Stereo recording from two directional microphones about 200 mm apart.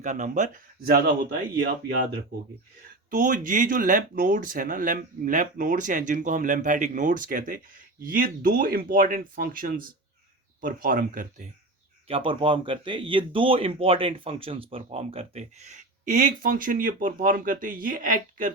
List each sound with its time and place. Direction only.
0.0 s speech: 40° right (ahead or behind)
3.1 s speech: 40° right (ahead or behind)
12.0 s speech: 25° right (ahead or behind); by 18.5 s 45° right (ahead or behind)